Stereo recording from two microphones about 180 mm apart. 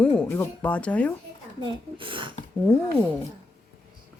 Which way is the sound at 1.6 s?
25° right (ahead or behind).